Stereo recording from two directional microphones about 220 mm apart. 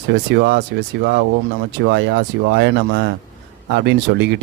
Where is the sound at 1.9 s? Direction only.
50° right (ahead or behind).